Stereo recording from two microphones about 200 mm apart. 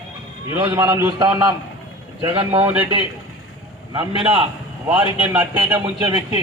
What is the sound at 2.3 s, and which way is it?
Speech, 25° right (ahead or behind).